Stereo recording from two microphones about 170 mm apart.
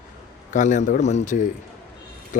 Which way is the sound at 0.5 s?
45° left (ahead or behind).